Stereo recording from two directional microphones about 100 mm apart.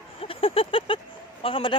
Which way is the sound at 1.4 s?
65° left (ahead or behind).